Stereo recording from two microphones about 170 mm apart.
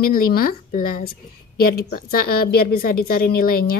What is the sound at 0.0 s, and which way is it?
A woman's voice, 60° left (ahead or behind).